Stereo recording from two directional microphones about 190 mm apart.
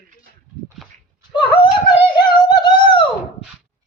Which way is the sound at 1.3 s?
25° left (ahead or behind).